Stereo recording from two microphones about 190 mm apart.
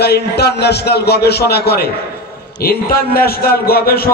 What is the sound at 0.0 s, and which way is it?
A man's voice, 60° left (ahead or behind).